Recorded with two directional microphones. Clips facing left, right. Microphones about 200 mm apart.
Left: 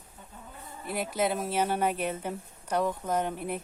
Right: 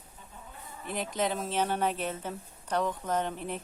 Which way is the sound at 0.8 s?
10° left (ahead or behind).